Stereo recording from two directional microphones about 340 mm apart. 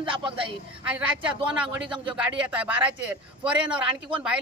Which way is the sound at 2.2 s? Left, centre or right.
Centre.